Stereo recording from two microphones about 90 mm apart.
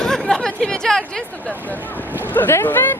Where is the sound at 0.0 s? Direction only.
5° left (ahead or behind).